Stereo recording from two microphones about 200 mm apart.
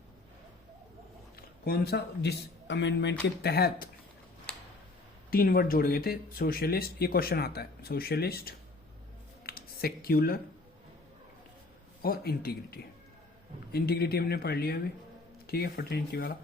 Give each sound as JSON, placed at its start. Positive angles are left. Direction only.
{"t": 1.4, "sound": "speech", "side_deg": 50}
{"t": 5.3, "sound": "speech", "side_deg": 50}
{"t": 9.4, "sound": "a sound", "side_deg": 50}
{"t": 12.0, "sound": "speech", "side_deg": 50}